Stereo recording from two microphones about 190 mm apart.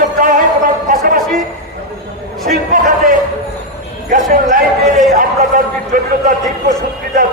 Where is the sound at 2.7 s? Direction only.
45° right (ahead or behind).